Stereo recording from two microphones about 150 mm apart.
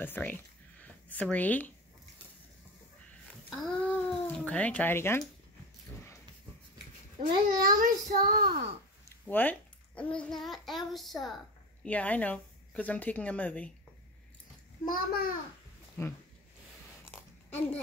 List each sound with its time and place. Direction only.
0.0 s speech: 10° left (ahead or behind)
3.4 s speech: 5° left (ahead or behind)
7.2 s a child's voice: 65° right (ahead or behind)
9.3 s a child's voice: 10° left (ahead or behind)
14.9 s a child's voice: 85° left
16.0 s speech: 15° left (ahead or behind)